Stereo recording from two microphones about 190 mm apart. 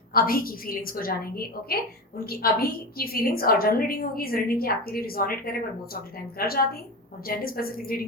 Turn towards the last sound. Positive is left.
turn(degrees=50)  # may be behind; listen again after turning